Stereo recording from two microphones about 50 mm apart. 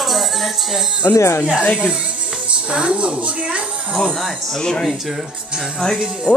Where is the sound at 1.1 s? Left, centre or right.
Left.